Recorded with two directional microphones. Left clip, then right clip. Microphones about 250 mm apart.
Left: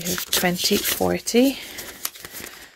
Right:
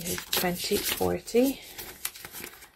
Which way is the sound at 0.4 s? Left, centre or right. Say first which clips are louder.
Left 7 dB; left.